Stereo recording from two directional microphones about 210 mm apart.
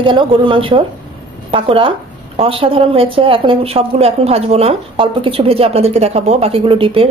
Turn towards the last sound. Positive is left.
turn(degrees=-25)  # may be behind; listen again after turning